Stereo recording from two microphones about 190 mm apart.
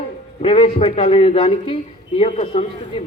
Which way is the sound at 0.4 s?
30° left (ahead or behind).